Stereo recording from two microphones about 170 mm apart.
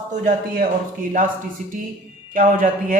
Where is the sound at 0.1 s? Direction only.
55° right (ahead or behind).